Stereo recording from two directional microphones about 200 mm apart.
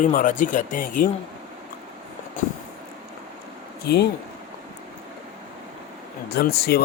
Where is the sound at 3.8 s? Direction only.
55° left (ahead or behind).